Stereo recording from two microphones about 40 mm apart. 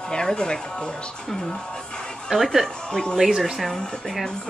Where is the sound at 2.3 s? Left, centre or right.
Centre.